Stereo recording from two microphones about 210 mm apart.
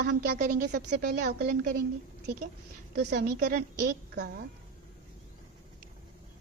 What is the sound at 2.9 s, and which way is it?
A woman's voice, 50° right (ahead or behind).